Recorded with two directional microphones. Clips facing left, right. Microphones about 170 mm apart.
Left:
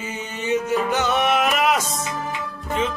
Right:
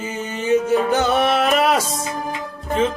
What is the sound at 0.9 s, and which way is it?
Music, 35° right (ahead or behind).